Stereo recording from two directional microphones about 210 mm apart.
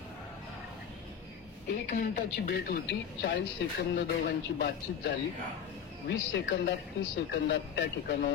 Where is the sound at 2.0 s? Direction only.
50° left (ahead or behind).